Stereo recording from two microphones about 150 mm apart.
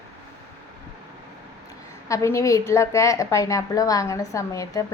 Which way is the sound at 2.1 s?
20° left (ahead or behind).